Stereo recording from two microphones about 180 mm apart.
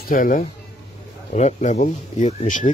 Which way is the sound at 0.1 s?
50° left (ahead or behind).